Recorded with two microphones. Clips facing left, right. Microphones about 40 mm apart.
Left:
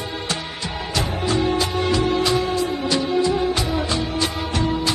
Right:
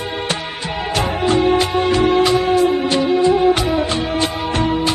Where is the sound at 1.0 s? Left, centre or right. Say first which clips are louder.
Right 5 dB; right.